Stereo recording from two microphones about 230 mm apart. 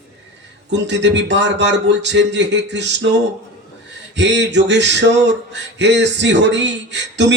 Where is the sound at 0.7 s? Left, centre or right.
Right.